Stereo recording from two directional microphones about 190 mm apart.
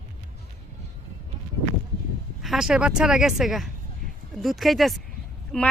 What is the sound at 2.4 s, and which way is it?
Speech, centre (ahead or behind).